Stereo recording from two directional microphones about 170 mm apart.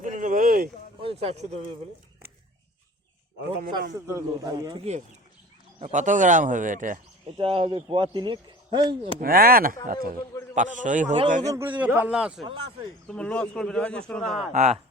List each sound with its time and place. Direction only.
0.0 s a sound: 50° right (ahead or behind)
1.0 s speech: 35° right (ahead or behind)
3.9 s speech: 20° right (ahead or behind)
5.8 s speech: 45° right (ahead or behind)
7.3 s speech: 35° right (ahead or behind)
9.2 s speech: 60° right (ahead or behind)
11.5 s a man's voice: 10° right (ahead or behind)
13.1 s speech: 5° left (ahead or behind)
14.5 s speech: 45° right (ahead or behind)